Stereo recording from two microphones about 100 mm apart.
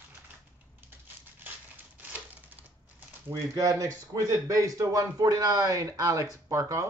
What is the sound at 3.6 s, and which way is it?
Speech, 35° right (ahead or behind).